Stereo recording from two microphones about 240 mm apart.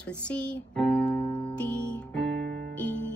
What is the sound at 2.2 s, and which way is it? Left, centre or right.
Music, right.